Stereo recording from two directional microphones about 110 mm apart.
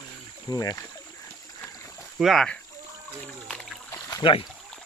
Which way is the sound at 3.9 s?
25° left (ahead or behind).